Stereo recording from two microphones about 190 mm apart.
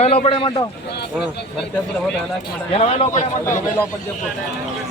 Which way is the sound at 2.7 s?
35° left (ahead or behind).